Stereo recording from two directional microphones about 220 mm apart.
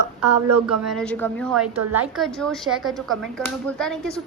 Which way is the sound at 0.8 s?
5° left (ahead or behind).